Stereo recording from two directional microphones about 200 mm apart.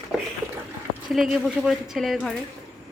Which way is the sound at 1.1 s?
Centre (ahead or behind).